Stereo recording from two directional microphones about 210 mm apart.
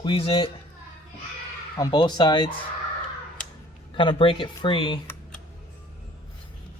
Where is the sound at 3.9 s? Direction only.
25° left (ahead or behind).